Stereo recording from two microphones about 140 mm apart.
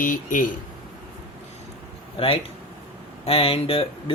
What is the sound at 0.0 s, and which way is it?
Speech, 70° left (ahead or behind).